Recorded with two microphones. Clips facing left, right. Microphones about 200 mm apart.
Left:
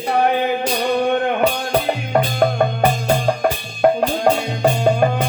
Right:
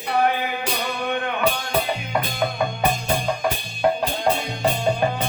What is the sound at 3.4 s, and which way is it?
Music, 55° left (ahead or behind).